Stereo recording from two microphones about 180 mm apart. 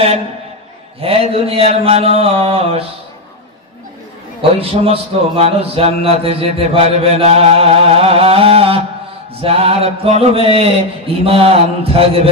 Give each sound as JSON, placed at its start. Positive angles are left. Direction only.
{"t": 1.0, "sound": "a man's voice", "side_deg": -30}
{"t": 4.4, "sound": "a man's voice", "side_deg": -30}